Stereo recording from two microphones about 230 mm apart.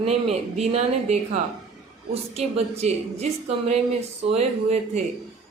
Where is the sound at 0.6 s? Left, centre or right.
Right.